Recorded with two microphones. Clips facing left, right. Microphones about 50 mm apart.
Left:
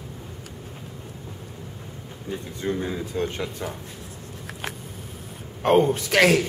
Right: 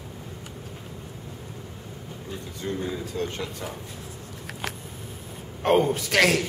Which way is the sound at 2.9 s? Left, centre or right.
Centre.